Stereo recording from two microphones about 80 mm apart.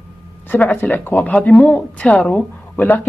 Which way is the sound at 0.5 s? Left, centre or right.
Left.